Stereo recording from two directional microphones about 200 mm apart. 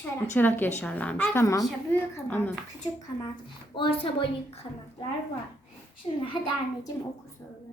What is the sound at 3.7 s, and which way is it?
Speech, 25° left (ahead or behind).